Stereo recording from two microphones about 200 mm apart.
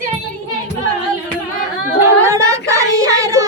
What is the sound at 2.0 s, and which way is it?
Singing, 15° right (ahead or behind).